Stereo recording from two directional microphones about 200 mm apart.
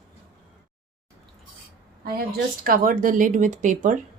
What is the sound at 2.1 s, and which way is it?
Speech, 50° right (ahead or behind).